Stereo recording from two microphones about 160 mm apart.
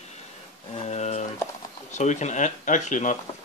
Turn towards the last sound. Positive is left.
turn(degrees=50)  # may be behind; listen again after turning